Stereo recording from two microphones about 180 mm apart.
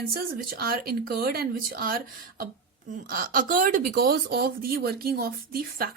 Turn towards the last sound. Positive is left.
turn(degrees=-55)  # may be behind; listen again after turning